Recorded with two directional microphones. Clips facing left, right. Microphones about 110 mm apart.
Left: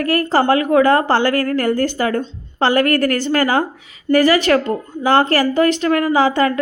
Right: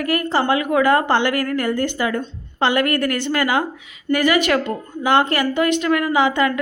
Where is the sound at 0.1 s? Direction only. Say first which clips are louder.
Left 4 dB; 35° left (ahead or behind).